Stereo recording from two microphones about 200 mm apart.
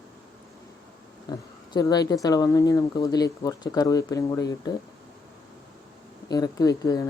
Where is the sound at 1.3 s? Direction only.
20° left (ahead or behind).